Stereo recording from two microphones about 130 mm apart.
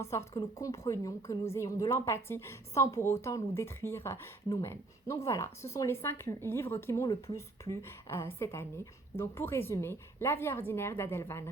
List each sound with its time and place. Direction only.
0.0 s a woman's voice: 20° left (ahead or behind)